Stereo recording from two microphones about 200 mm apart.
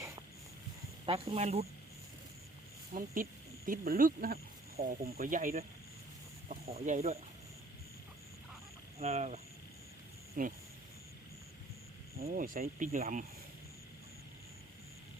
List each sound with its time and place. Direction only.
1.0 s speech: 30° right (ahead or behind)
2.9 s speech: 45° right (ahead or behind)
9.0 s speech: 30° right (ahead or behind)
12.2 s speech: 45° right (ahead or behind)